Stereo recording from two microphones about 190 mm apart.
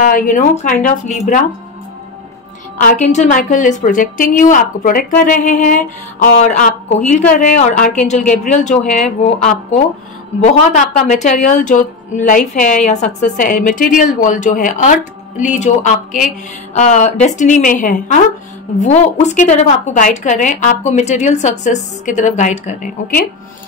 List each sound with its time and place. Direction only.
0.0 s a woman's voice: 45° left (ahead or behind)
2.8 s a woman's voice: 40° left (ahead or behind)